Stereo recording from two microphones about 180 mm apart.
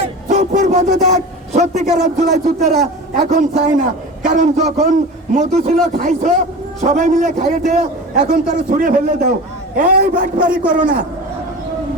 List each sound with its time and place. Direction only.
0.3 s a man's voice: 45° right (ahead or behind)
2.6 s a man's voice: centre (ahead or behind)
3.2 s a man's voice: 40° right (ahead or behind)